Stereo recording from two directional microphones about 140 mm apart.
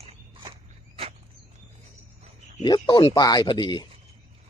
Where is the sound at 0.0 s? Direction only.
45° right (ahead or behind).